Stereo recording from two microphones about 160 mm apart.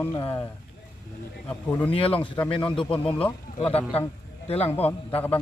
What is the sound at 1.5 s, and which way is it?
Speech, 10° left (ahead or behind).